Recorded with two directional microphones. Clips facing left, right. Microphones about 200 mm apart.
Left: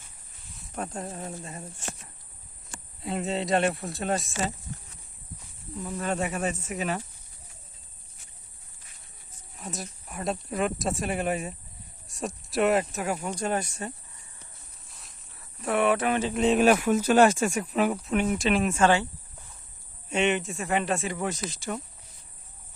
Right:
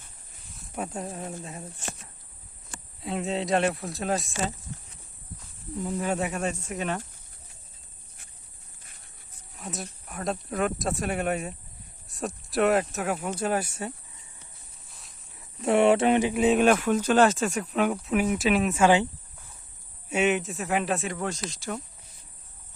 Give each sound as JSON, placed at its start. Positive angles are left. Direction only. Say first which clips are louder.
{"t": 0.5, "sound": "speech", "louder": "right 1 dB", "side_deg": -5}
{"t": 3.0, "sound": "speech", "louder": "even", "side_deg": 0}
{"t": 5.8, "sound": "speech", "louder": "right 2 dB", "side_deg": -15}
{"t": 6.1, "sound": "speech", "louder": "even", "side_deg": 0}
{"t": 9.6, "sound": "speech", "louder": "right 1 dB", "side_deg": 0}
{"t": 14.8, "sound": "cricket", "louder": "even", "side_deg": 0}
{"t": 15.4, "sound": "speech", "louder": "right 4 dB", "side_deg": -25}
{"t": 16.2, "sound": "speech", "louder": "right 1 dB", "side_deg": -5}
{"t": 20.1, "sound": "speech", "louder": "right 1 dB", "side_deg": -5}